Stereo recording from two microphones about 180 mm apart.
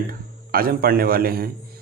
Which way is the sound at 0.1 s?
55° right (ahead or behind).